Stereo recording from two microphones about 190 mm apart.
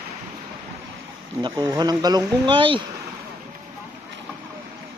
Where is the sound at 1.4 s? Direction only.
25° right (ahead or behind).